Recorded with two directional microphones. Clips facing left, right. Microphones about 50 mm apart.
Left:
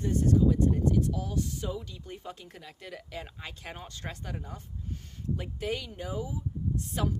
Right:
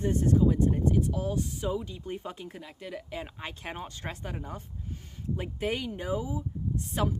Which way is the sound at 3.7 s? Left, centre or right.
Right.